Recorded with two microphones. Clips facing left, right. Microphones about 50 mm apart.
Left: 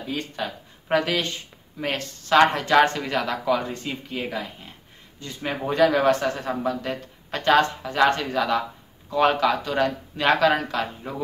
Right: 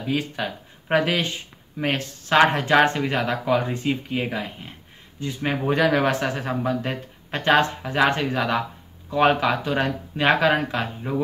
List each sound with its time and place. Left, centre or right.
0.4 s speech: centre
5.6 s speech: centre
6.6 s speech: right